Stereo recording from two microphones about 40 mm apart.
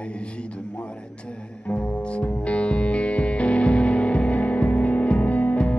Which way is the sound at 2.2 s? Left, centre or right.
Left.